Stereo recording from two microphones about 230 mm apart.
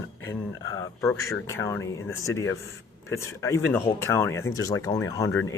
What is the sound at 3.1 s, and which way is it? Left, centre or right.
Speech, centre.